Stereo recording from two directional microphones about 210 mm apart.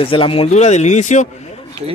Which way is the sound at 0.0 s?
25° left (ahead or behind).